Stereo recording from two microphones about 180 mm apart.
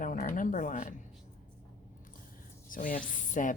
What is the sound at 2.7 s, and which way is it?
Speech, 50° left (ahead or behind).